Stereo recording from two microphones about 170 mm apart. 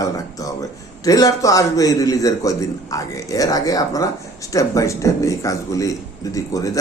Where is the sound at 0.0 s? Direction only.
20° left (ahead or behind).